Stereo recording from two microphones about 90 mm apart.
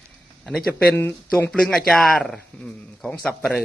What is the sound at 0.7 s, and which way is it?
Speech, 20° left (ahead or behind).